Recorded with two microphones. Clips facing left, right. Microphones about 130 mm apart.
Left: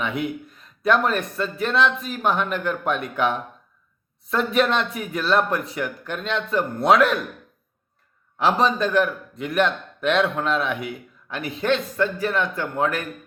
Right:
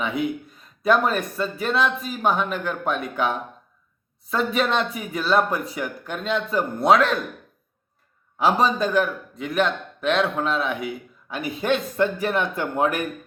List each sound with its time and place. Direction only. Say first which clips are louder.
0.0 s a man's voice: right 1 dB; centre (ahead or behind)
8.4 s a man's voice: even; 5° right (ahead or behind)